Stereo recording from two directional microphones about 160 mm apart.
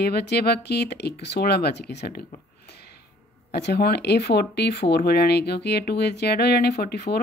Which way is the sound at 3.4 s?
90° left.